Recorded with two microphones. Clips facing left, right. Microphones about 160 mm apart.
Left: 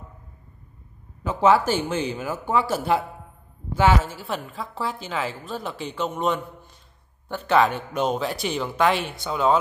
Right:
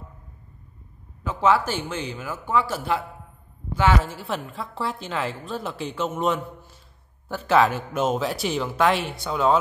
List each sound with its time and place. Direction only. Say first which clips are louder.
1.2 s a woman's voice: left 2 dB; 5° left (ahead or behind)
2.1 s speech: left 1 dB; 25° left (ahead or behind)
3.8 s a woman's voice: left 2 dB; centre (ahead or behind)